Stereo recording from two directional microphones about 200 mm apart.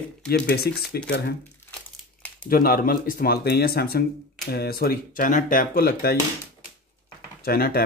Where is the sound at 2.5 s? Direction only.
45° left (ahead or behind).